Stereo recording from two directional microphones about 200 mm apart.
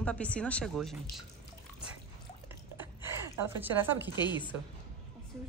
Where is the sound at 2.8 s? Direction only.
10° right (ahead or behind).